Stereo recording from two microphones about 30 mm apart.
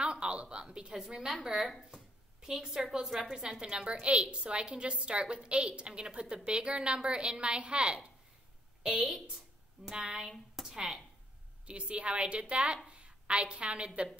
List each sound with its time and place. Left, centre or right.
0.0 s a woman's voice: right
3.6 s a woman's voice: right
8.8 s a woman's voice: centre
10.6 s a sound: centre
11.6 s a woman's voice: right